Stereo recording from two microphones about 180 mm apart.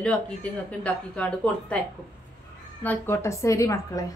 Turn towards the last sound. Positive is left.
turn(degrees=15)  # may be behind; listen again after turning